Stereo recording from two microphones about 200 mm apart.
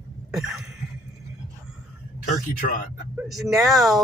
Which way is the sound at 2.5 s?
45° left (ahead or behind).